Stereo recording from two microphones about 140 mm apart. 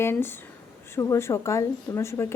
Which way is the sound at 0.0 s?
15° left (ahead or behind).